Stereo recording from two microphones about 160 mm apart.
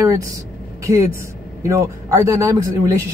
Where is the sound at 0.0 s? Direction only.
20° right (ahead or behind).